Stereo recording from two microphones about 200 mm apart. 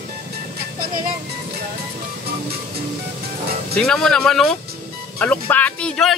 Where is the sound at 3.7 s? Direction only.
5° left (ahead or behind).